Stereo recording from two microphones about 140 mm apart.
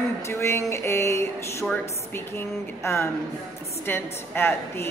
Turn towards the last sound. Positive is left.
turn(degrees=15)  # may be behind; listen again after turning